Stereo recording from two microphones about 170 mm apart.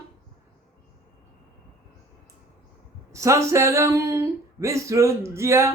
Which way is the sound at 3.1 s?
15° right (ahead or behind).